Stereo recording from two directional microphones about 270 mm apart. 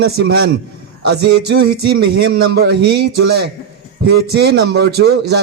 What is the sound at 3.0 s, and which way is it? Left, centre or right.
Speech, right.